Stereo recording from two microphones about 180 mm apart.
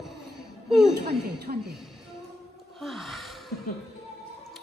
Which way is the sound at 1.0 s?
65° right (ahead or behind).